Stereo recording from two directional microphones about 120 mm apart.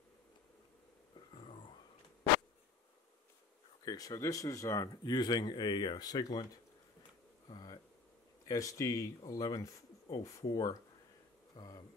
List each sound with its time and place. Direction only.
3.8 s speech: 30° left (ahead or behind)
7.4 s a sound: 35° left (ahead or behind)
8.5 s speech: 25° left (ahead or behind)